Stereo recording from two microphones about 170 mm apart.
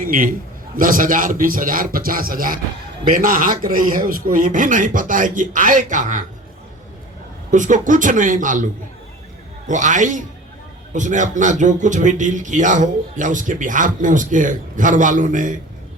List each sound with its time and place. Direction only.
0.0 s a man's voice: 55° right (ahead or behind)
7.5 s speech: 50° right (ahead or behind)
9.6 s speech: 45° right (ahead or behind)